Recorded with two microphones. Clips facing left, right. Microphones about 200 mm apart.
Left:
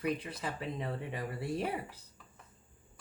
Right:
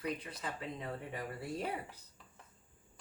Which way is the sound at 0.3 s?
30° left (ahead or behind).